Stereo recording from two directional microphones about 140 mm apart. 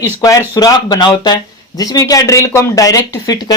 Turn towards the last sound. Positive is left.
turn(degrees=25)  # may be behind; listen again after turning